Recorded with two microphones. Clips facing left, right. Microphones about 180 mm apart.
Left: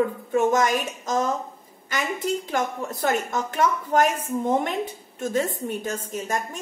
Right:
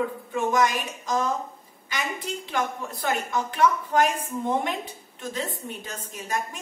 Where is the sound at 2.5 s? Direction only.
45° left (ahead or behind).